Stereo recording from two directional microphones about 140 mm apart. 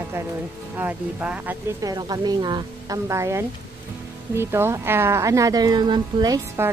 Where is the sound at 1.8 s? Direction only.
30° right (ahead or behind).